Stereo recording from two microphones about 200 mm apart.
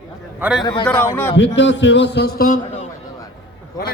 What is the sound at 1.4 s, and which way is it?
A man's voice, 65° left (ahead or behind).